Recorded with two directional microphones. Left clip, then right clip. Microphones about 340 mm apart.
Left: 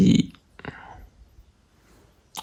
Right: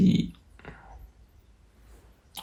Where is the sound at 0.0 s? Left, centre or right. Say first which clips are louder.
Left 5 dB; left.